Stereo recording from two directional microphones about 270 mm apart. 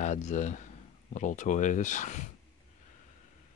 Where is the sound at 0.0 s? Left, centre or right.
Left.